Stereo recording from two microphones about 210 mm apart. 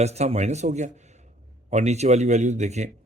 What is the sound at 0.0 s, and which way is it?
Speech, 30° right (ahead or behind).